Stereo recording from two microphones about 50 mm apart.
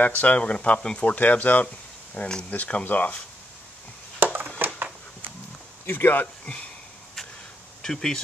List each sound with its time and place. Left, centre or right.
0.0 s speech: left
2.1 s speech: centre
2.5 s speech: left
4.2 s a sound: right
5.9 s speech: left
6.4 s speech: left
7.8 s speech: centre